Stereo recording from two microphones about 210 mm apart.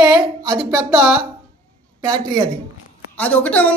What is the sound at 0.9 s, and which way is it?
Speech, 5° right (ahead or behind).